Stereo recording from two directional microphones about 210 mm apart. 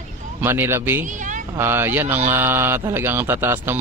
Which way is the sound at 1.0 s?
35° right (ahead or behind).